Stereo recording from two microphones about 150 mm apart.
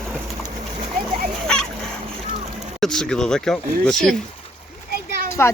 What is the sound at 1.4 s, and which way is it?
Dog, 5° left (ahead or behind).